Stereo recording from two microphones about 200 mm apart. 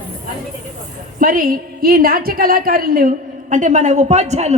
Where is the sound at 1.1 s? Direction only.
45° right (ahead or behind).